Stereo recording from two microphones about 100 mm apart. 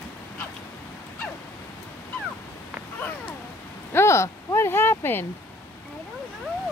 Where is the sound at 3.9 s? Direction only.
25° left (ahead or behind).